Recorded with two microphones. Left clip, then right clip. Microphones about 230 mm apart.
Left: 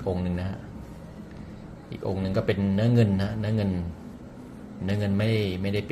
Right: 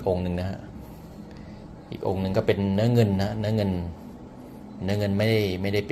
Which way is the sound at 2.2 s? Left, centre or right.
Centre.